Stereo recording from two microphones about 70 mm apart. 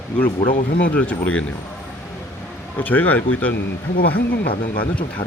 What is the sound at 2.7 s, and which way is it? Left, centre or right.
Speech, left.